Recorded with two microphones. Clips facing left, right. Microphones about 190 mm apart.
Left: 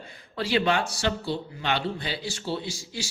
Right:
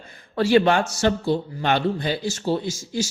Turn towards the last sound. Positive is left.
turn(degrees=-45)  # may be behind; listen again after turning